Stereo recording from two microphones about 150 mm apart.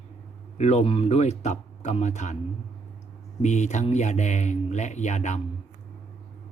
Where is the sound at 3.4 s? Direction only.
50° left (ahead or behind).